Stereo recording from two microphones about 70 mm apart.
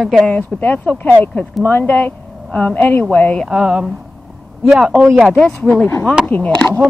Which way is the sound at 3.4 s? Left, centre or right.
Centre.